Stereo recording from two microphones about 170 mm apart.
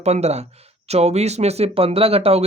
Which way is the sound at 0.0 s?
40° right (ahead or behind).